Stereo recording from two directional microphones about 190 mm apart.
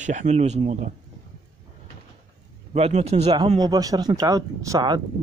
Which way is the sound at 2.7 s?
35° right (ahead or behind).